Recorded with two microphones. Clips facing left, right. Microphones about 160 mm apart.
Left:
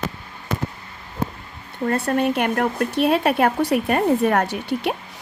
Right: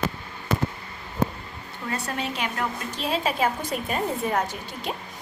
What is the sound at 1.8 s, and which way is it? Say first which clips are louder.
Speech: left 10 dB; 55° left (ahead or behind).